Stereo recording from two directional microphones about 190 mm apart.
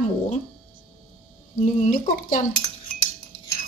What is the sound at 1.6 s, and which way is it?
Speech, 45° left (ahead or behind).